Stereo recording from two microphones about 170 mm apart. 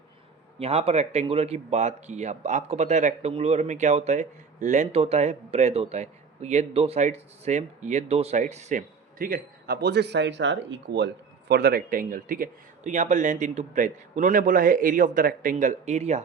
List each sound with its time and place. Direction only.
0.6 s speech: 35° right (ahead or behind)
9.1 s speech: 60° right (ahead or behind); by 16.2 s 40° right (ahead or behind)